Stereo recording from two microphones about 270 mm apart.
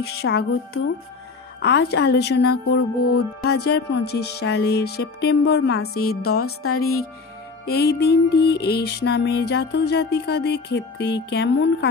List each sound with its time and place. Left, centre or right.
0.0 s music: left
6.3 s music: left
7.6 s music: left